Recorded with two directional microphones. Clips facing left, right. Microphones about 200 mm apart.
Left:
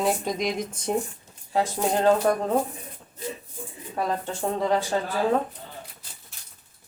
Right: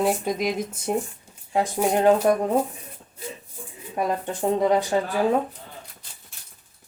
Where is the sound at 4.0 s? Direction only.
15° right (ahead or behind).